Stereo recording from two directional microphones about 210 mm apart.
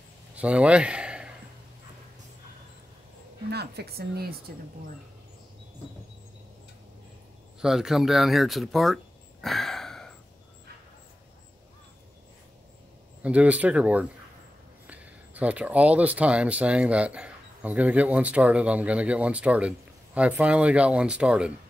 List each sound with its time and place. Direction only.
0.4 s a man's voice: 5° right (ahead or behind)
3.4 s speech: 50° right (ahead or behind)
7.6 s speech: centre (ahead or behind)
13.2 s speech: 5° right (ahead or behind)